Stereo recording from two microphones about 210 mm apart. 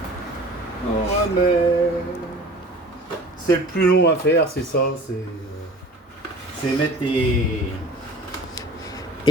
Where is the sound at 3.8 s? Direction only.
50° left (ahead or behind).